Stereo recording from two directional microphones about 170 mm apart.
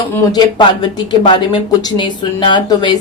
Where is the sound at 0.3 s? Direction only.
25° left (ahead or behind).